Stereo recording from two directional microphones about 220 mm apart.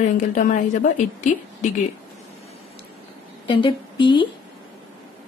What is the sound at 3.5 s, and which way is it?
Speech, 20° left (ahead or behind).